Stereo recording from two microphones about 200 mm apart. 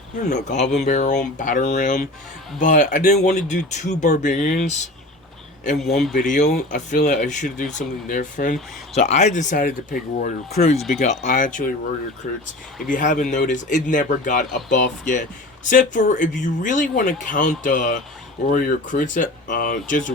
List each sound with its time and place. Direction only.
0.3 s speech: 35° left (ahead or behind)
5.8 s speech: centre (ahead or behind)
6.2 s speech: 40° left (ahead or behind)
10.8 s speech: centre (ahead or behind)
11.0 s speech: 35° left (ahead or behind)